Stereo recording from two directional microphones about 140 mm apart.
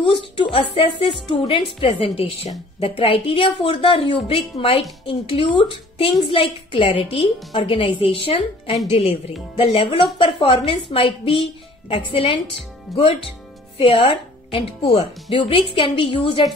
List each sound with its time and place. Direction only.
0.0 s a woman's voice: 40° left (ahead or behind)
12.9 s speech: centre (ahead or behind)
13.7 s speech: 35° left (ahead or behind)